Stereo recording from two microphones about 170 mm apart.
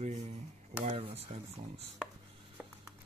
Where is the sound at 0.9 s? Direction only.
35° right (ahead or behind).